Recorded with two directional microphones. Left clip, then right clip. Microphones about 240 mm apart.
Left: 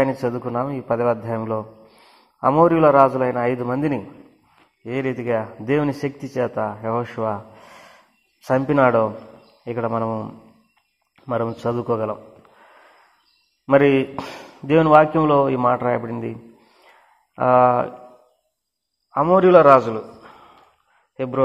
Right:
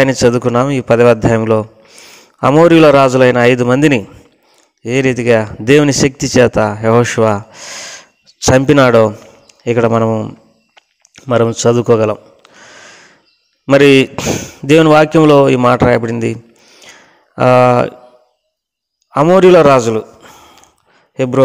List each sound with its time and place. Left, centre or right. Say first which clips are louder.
0.0 s speech: right 11 dB; right
11.1 s a sound: right 11 dB; right
13.7 s a man's voice: right 8 dB; right
19.1 s a man's voice: right 7 dB; right